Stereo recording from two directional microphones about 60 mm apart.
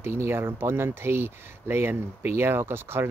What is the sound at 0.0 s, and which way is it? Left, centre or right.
Speech, right.